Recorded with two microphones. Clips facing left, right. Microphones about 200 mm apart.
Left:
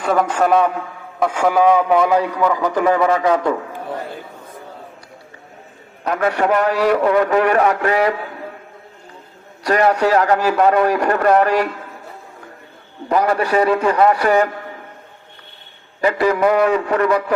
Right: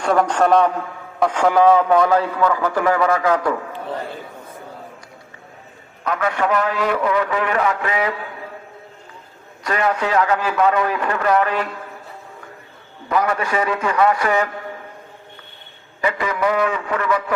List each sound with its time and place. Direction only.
0.0 s a man's voice: 5° left (ahead or behind); by 3.6 s 25° left (ahead or behind)
6.1 s a man's voice: 40° left (ahead or behind)
9.6 s a man's voice: 40° left (ahead or behind)
13.1 s a man's voice: 35° left (ahead or behind)
16.0 s a man's voice: 35° left (ahead or behind)